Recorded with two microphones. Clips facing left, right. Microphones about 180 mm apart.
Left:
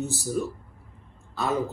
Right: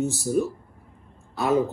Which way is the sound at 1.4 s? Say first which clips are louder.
Right 5 dB; 15° right (ahead or behind).